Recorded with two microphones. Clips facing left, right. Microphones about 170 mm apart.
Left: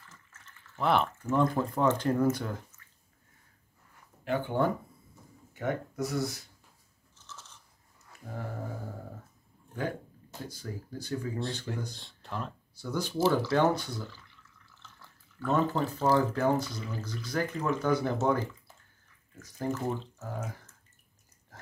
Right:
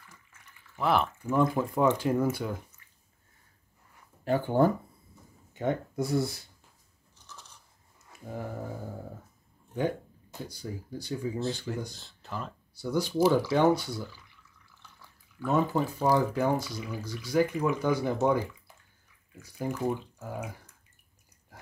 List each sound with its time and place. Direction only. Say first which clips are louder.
0.0 s a sound: even; 15° right (ahead or behind)
0.8 s speech: even; centre (ahead or behind)
4.2 s speech: right 4 dB; 40° right (ahead or behind)
5.5 s speech: right 3 dB; 25° right (ahead or behind)
7.2 s biting: left 1 dB; 15° right (ahead or behind)
10.6 s speech: right 2 dB; 15° right (ahead or behind)
11.3 s speech: right 3 dB; centre (ahead or behind)
12.9 s speech: right 3 dB; 10° right (ahead or behind)
19.4 s speech: right 1 dB; 10° right (ahead or behind)